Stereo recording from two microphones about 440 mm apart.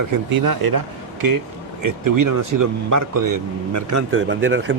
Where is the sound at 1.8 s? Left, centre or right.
Right.